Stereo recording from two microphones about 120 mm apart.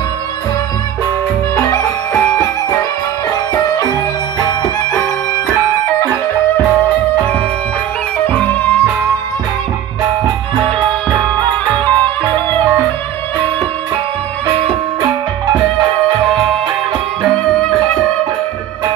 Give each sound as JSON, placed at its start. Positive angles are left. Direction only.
{"t": 3.5, "sound": "music", "side_deg": 30}
{"t": 8.3, "sound": "music", "side_deg": 15}
{"t": 11.3, "sound": "music", "side_deg": 15}
{"t": 17.2, "sound": "music", "side_deg": 5}